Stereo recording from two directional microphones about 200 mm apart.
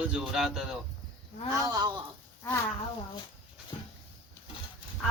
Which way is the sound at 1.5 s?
20° right (ahead or behind).